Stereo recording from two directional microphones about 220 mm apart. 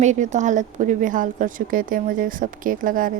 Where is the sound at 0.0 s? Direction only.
35° right (ahead or behind).